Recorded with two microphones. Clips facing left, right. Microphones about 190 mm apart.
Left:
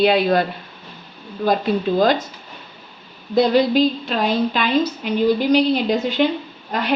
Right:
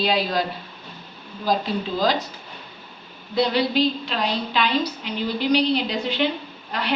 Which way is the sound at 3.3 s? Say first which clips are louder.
Left 6 dB; 45° left (ahead or behind).